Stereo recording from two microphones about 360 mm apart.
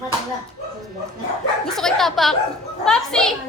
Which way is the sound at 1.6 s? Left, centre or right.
Centre.